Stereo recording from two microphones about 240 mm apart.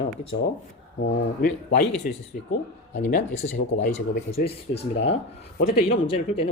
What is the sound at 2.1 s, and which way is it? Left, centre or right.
Speech, left.